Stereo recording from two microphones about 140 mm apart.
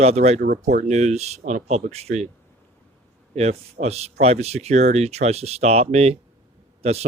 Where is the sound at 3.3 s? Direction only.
50° right (ahead or behind).